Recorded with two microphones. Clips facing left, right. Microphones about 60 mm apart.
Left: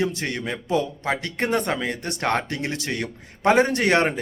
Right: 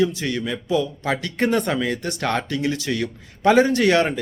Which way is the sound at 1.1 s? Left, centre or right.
Left.